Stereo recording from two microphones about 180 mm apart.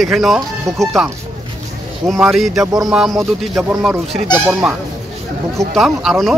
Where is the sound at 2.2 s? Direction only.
Centre (ahead or behind).